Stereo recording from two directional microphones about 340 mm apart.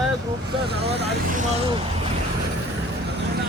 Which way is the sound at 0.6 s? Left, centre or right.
Right.